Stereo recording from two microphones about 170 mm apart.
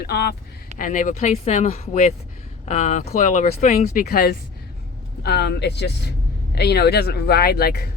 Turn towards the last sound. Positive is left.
turn(degrees=65)  # may be behind; listen again after turning